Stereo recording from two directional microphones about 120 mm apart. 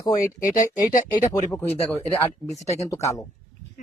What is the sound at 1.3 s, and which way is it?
Speech, 25° left (ahead or behind).